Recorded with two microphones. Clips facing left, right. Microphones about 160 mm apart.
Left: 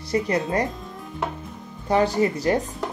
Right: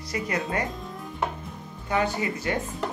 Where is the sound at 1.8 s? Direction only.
35° left (ahead or behind).